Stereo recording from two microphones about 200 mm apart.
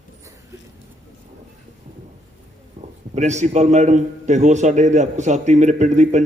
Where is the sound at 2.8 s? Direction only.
40° right (ahead or behind).